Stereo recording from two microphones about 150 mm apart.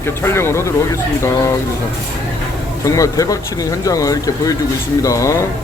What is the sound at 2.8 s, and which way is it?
Speech, 20° left (ahead or behind).